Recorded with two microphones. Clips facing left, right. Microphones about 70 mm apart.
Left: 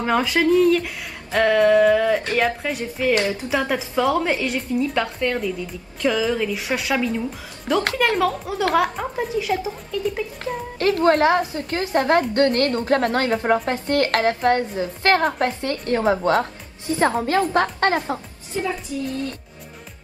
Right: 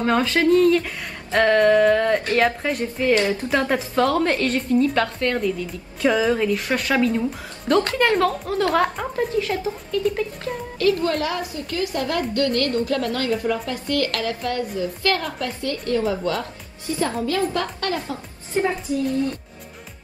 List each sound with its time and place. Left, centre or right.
0.0 s a woman's voice: centre
6.0 s a woman's voice: centre
10.8 s a woman's voice: left
18.5 s a woman's voice: right